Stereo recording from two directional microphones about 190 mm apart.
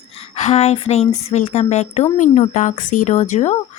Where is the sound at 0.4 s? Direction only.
35° left (ahead or behind).